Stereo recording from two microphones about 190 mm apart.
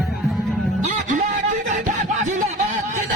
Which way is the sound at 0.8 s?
45° right (ahead or behind).